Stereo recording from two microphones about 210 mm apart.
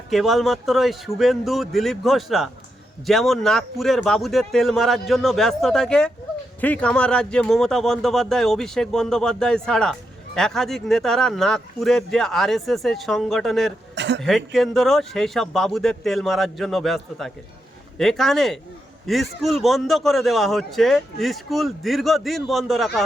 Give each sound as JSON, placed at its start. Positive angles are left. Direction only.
{"t": 0.1, "sound": "a man's voice", "side_deg": 0}
{"t": 13.9, "sound": "a sound", "side_deg": -55}
{"t": 14.2, "sound": "a man's voice", "side_deg": 0}